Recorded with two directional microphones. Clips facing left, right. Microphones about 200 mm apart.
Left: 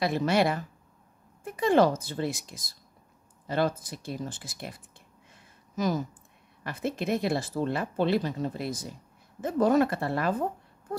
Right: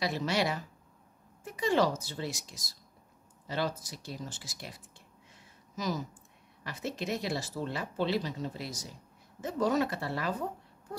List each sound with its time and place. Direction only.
0.0 s speech: 55° left (ahead or behind)
5.3 s a sound: 55° left (ahead or behind)
6.6 s speech: 55° left (ahead or behind)